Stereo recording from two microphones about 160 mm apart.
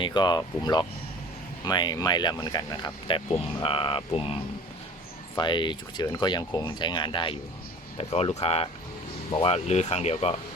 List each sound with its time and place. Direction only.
0.0 s speech: 30° left (ahead or behind)
5.4 s speech: 30° left (ahead or behind)